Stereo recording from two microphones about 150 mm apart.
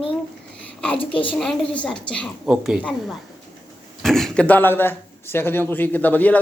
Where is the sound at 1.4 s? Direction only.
5° left (ahead or behind).